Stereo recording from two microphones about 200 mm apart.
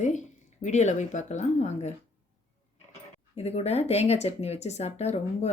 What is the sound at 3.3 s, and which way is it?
Speech, 30° left (ahead or behind).